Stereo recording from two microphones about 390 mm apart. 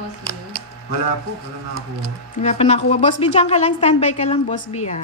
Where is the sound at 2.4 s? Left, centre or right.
Centre.